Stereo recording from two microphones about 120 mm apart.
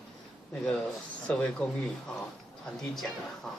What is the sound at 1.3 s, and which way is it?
Speech, 10° left (ahead or behind).